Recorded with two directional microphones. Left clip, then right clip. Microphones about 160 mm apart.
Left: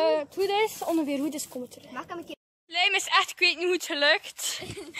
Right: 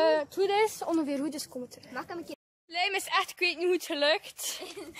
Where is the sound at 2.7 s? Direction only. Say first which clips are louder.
Left 5 dB; centre (ahead or behind).